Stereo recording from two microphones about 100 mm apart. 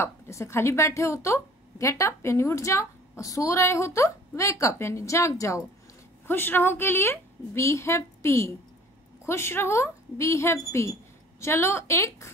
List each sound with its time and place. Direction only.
0.0 s a woman's voice: 30° left (ahead or behind)